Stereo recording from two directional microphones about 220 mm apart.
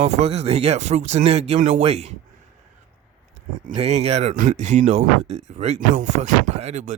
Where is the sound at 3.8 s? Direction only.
30° right (ahead or behind).